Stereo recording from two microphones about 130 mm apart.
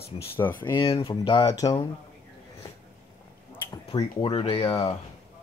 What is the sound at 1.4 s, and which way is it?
Speech, 30° left (ahead or behind).